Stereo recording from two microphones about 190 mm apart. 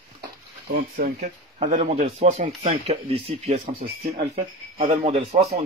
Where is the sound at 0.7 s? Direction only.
55° right (ahead or behind); by 5.5 s 35° right (ahead or behind).